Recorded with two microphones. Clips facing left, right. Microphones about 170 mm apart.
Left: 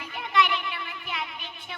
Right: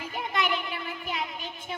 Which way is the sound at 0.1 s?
45° right (ahead or behind).